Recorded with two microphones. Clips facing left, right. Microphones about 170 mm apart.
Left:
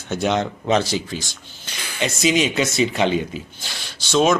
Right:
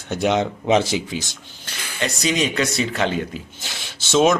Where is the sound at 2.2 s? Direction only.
25° left (ahead or behind).